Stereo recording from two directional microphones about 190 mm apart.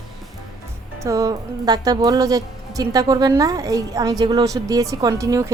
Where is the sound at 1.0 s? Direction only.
15° right (ahead or behind).